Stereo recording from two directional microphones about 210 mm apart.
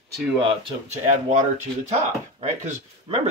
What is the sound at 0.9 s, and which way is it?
Speech, 35° right (ahead or behind).